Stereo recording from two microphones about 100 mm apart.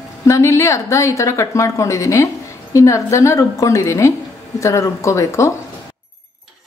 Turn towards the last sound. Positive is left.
turn(degrees=30)  # may be behind; listen again after turning